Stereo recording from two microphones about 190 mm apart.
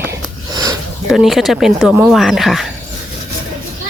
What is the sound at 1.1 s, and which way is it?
Speech, centre (ahead or behind).